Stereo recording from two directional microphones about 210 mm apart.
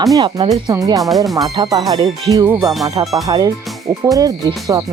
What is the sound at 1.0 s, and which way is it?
Speech, centre (ahead or behind).